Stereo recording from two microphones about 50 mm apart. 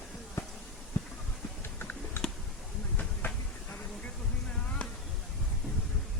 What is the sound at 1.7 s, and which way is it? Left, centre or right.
Typing, left.